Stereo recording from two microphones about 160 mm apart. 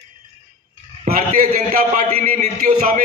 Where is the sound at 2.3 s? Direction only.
50° right (ahead or behind).